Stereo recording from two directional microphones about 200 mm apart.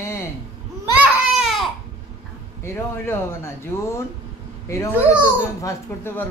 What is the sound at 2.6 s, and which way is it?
Speech, 10° left (ahead or behind).